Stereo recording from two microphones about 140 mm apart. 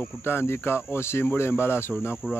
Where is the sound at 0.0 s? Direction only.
15° left (ahead or behind).